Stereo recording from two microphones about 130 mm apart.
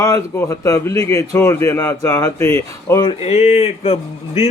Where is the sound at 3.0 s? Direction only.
50° left (ahead or behind).